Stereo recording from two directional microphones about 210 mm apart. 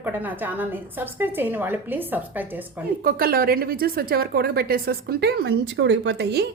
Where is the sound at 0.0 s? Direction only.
10° right (ahead or behind).